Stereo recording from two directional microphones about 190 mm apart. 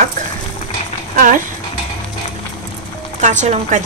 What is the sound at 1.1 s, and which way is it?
Speech, 45° right (ahead or behind).